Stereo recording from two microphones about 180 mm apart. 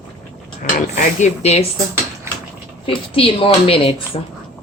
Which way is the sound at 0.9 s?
40° left (ahead or behind).